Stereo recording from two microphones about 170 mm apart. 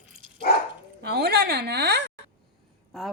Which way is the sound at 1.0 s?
75° right (ahead or behind).